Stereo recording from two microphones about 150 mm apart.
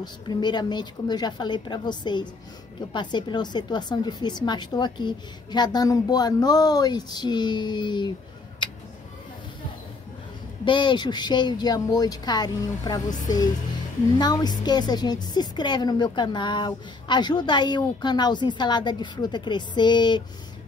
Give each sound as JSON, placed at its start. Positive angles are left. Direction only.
{"t": 0.0, "sound": "a woman's voice", "side_deg": 30}
{"t": 10.6, "sound": "a woman's voice", "side_deg": 30}